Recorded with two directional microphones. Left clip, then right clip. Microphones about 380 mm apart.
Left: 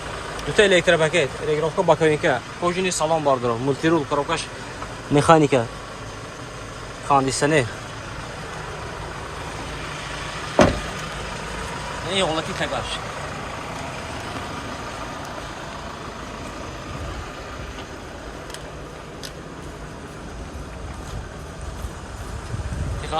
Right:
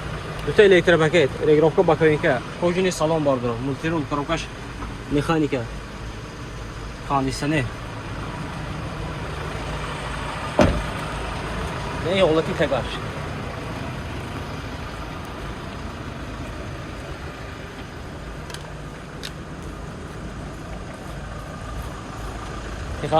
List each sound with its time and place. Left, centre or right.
0.5 s speech: centre
7.1 s speech: centre
10.6 s vehicle: left
12.0 s speech: centre